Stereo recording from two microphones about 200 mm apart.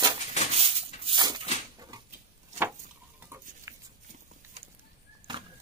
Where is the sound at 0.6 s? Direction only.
30° right (ahead or behind).